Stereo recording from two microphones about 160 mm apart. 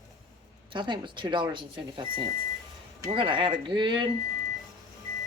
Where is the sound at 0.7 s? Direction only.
30° right (ahead or behind).